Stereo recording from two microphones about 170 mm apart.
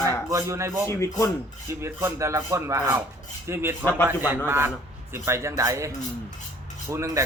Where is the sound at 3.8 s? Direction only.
15° left (ahead or behind).